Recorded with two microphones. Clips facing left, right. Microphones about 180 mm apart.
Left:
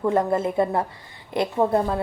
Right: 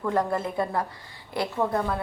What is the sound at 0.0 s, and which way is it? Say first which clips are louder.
A woman's voice: left 5 dB; 25° left (ahead or behind).